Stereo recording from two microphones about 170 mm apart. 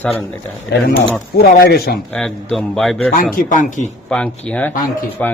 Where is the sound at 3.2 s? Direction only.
50° left (ahead or behind).